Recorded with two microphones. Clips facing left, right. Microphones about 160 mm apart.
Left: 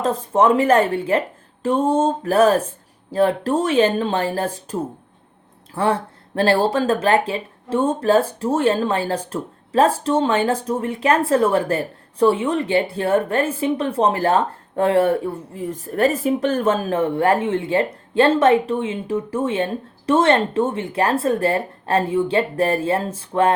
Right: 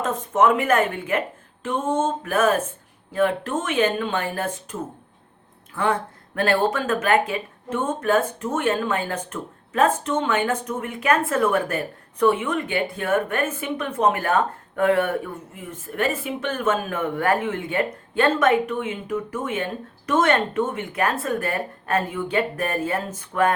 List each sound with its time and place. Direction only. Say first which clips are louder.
0.0 s a woman's voice: left 3 dB; 35° left (ahead or behind)